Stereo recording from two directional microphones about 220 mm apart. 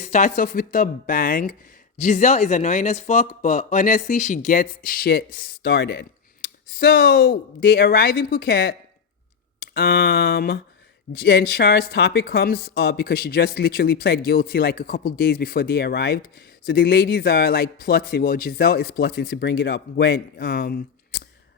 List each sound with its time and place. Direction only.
0.0 s speech: 35° left (ahead or behind)